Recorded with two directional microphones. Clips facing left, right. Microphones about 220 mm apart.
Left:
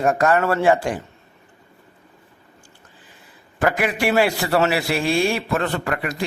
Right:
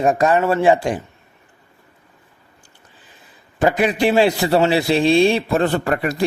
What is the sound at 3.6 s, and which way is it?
A man's voice, 20° right (ahead or behind).